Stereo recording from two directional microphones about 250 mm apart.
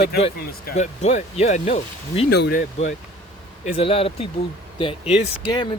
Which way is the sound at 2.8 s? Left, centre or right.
Left.